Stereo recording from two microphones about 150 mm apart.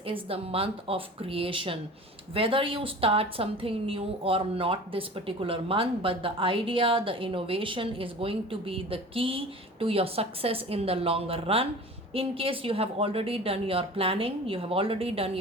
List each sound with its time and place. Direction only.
0.0 s a woman's voice: 40° right (ahead or behind)